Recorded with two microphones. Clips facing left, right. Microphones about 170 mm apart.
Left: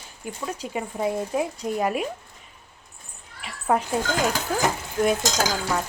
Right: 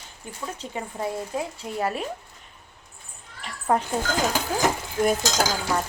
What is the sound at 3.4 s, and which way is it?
Cat, 5° left (ahead or behind).